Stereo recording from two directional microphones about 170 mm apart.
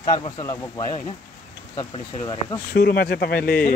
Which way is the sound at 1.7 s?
25° left (ahead or behind).